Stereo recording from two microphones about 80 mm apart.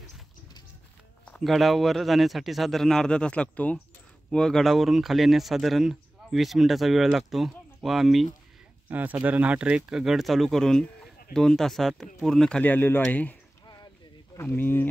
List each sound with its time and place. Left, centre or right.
1.4 s speech: centre
8.8 s speech: right; by 12.6 s centre
12.6 s speech: left
14.4 s speech: left